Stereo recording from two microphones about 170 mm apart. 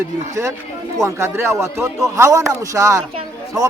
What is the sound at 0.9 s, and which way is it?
Speech, 15° right (ahead or behind).